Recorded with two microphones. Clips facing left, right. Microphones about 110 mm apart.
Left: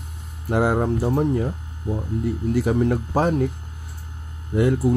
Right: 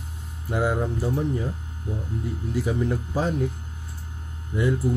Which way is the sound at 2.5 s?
60° left (ahead or behind).